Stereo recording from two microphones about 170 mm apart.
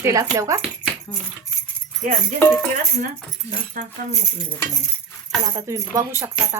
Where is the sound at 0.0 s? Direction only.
20° right (ahead or behind).